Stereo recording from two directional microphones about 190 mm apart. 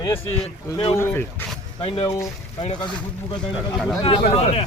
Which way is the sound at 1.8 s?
25° left (ahead or behind).